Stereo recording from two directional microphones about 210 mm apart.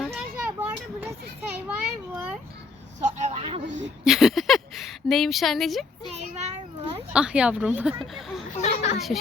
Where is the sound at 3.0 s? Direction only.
30° right (ahead or behind).